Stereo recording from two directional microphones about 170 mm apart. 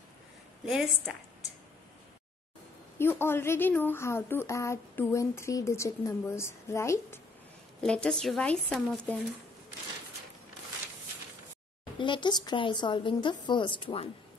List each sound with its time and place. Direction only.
0.7 s speech: centre (ahead or behind)
3.0 s a woman's voice: 15° left (ahead or behind)
7.8 s speech: 5° left (ahead or behind)
12.0 s speech: 25° left (ahead or behind)